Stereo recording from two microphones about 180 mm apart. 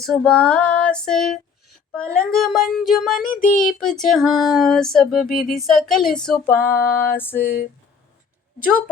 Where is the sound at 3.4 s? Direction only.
50° left (ahead or behind).